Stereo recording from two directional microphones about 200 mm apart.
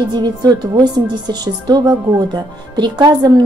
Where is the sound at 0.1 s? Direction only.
20° right (ahead or behind).